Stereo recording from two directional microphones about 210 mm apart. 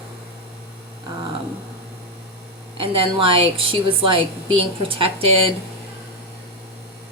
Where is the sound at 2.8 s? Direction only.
25° right (ahead or behind).